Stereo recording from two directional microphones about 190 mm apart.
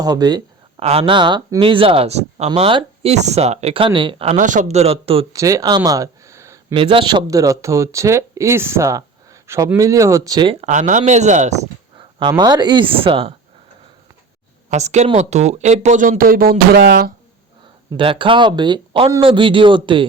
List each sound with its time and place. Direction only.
0.0 s speech: 20° right (ahead or behind)
0.8 s speech: 30° right (ahead or behind)
4.4 s speech: 40° right (ahead or behind)
5.3 s speech: 15° right (ahead or behind)
6.7 s speech: 25° right (ahead or behind)
10.7 s speech: 40° right (ahead or behind)
12.3 s speech: 20° right (ahead or behind)
14.7 s speech: 35° right (ahead or behind); by 17.1 s 55° right (ahead or behind)
17.9 s speech: 25° right (ahead or behind)